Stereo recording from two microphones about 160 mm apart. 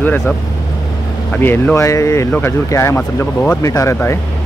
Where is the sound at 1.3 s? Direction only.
10° left (ahead or behind).